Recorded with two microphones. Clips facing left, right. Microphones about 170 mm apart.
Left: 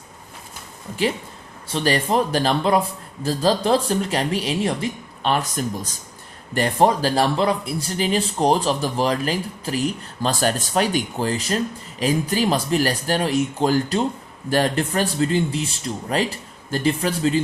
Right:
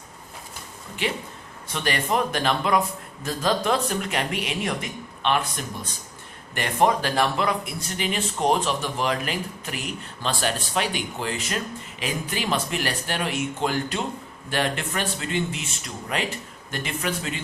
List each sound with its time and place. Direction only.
1.7 s speech: 35° left (ahead or behind)